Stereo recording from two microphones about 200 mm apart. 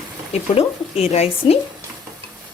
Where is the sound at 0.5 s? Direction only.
30° left (ahead or behind).